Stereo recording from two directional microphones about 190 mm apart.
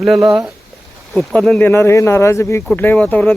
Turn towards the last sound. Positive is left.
turn(degrees=10)  # may be behind; listen again after turning